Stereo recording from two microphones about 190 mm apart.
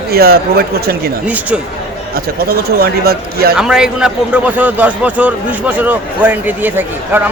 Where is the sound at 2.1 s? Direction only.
55° right (ahead or behind).